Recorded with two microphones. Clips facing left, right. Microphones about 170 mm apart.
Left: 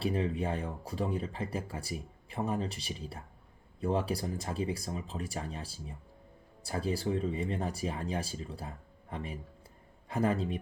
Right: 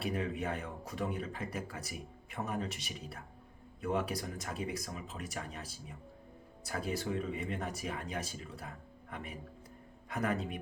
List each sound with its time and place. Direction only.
0.0 s speech: 30° left (ahead or behind)